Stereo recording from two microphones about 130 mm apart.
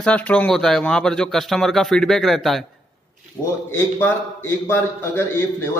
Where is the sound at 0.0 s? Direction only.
10° left (ahead or behind).